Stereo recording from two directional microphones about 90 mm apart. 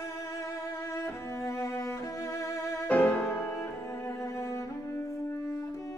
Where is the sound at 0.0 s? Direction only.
35° left (ahead or behind).